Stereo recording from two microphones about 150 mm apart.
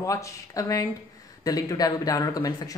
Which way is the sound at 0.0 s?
20° left (ahead or behind).